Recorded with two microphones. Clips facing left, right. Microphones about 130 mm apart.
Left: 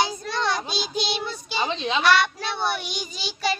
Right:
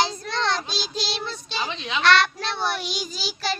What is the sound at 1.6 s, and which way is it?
Speech, 30° left (ahead or behind).